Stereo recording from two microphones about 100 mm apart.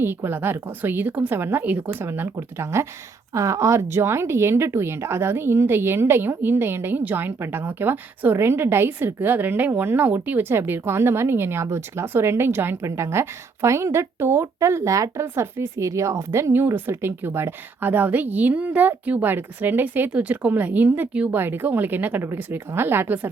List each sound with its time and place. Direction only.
0.0 s speech: 25° right (ahead or behind)